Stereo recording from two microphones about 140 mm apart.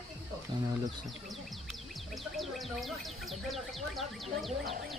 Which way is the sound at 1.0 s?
Centre (ahead or behind).